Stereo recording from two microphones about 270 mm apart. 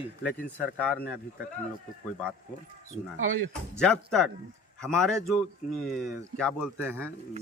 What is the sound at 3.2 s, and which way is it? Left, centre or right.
Speech, right.